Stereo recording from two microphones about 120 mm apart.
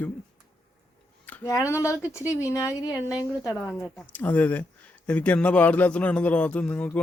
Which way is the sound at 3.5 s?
20° left (ahead or behind).